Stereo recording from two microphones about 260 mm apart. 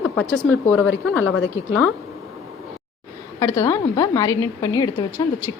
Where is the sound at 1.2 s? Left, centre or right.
Left.